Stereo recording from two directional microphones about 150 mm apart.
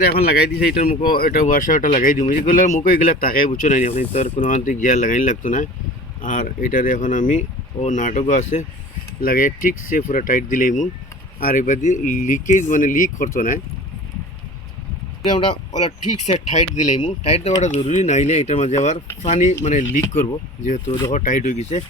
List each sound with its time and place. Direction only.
0.0 s speech: 90° left; by 3.5 s 70° left (ahead or behind)
3.6 s speech: 60° left (ahead or behind)
9.2 s speech: 70° left (ahead or behind)
15.2 s speech: 35° left (ahead or behind)
15.8 s speech: 50° left (ahead or behind)
17.0 s speech: 35° left (ahead or behind)
17.6 s speech: 50° left (ahead or behind)